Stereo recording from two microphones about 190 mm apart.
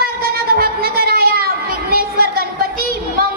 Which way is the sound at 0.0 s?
50° right (ahead or behind).